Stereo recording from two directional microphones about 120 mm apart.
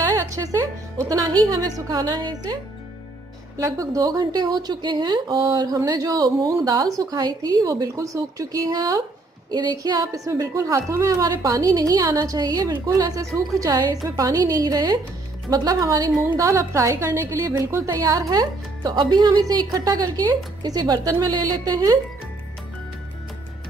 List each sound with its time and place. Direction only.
0.3 s music: 30° right (ahead or behind)
1.0 s a woman's voice: 30° right (ahead or behind)